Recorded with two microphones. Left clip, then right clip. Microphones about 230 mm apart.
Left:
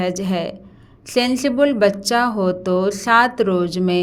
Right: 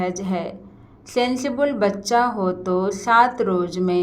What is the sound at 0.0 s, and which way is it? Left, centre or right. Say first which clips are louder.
Speech: left 3 dB; left.